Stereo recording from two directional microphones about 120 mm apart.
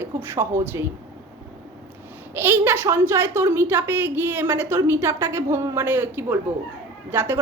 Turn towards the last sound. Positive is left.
turn(degrees=-15)  # may be behind; listen again after turning